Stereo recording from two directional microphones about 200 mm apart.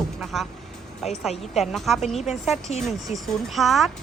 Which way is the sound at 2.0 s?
35° left (ahead or behind).